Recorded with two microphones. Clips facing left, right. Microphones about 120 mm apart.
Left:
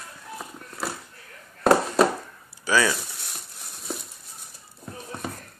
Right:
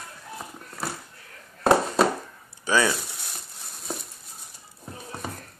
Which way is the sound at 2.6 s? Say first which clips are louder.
Even; 20° right (ahead or behind).